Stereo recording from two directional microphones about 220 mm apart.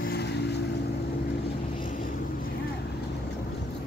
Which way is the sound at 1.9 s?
40° left (ahead or behind).